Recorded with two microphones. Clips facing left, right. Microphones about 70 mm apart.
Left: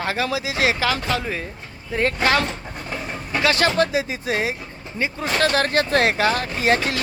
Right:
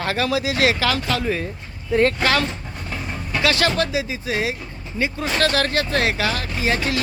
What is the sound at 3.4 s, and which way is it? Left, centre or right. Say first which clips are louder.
Speech: left 1 dB; left.